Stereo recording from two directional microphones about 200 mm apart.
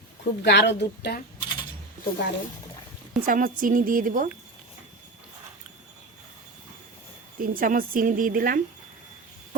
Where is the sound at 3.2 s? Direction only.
45° right (ahead or behind).